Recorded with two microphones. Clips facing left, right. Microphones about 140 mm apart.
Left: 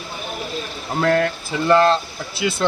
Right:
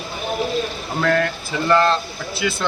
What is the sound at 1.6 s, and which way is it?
Speech, 20° left (ahead or behind).